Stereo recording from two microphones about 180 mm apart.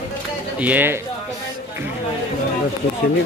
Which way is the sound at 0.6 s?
10° right (ahead or behind).